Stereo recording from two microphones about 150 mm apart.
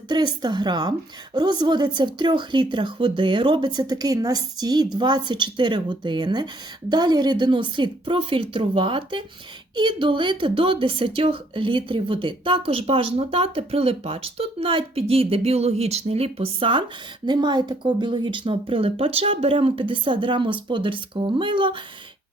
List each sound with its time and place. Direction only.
0.1 s a woman's voice: 30° right (ahead or behind)